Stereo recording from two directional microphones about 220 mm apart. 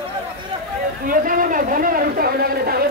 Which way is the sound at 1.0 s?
40° right (ahead or behind).